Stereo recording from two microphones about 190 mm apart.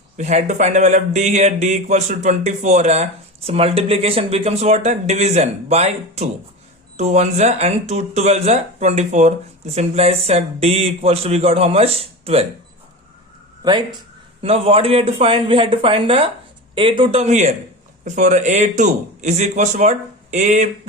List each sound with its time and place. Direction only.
0.2 s speech: 35° right (ahead or behind)
13.6 s speech: 20° right (ahead or behind); by 20.7 s 40° right (ahead or behind)